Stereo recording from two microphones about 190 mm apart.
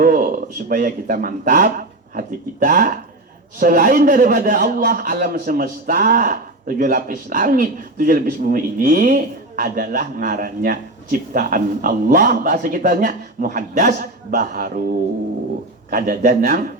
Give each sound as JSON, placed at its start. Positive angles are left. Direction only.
{"t": 0.0, "sound": "a man's voice", "side_deg": -45}
{"t": 15.9, "sound": "a man's voice", "side_deg": -50}